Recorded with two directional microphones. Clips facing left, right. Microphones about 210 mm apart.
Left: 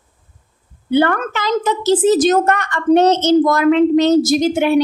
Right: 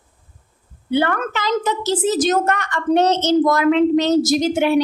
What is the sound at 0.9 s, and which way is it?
A woman's voice, 50° left (ahead or behind).